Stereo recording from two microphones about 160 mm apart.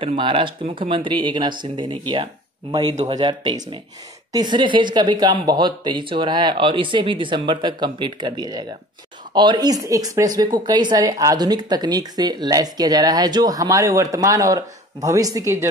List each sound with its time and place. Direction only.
0.0 s speech: 35° right (ahead or behind)